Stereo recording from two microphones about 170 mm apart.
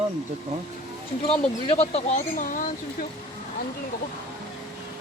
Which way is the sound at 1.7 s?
35° left (ahead or behind).